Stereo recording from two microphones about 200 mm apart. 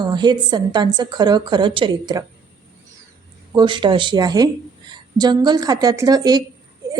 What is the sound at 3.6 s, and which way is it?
A woman's voice, 25° right (ahead or behind).